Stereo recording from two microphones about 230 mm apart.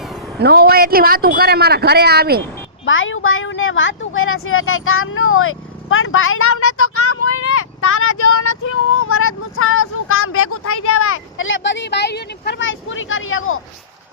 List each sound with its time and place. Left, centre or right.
0.3 s a man's voice: right
2.8 s speech: left